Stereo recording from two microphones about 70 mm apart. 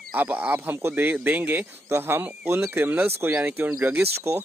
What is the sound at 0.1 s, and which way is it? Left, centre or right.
Speech, right.